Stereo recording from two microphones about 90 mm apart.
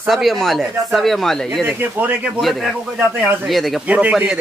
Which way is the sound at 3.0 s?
20° right (ahead or behind).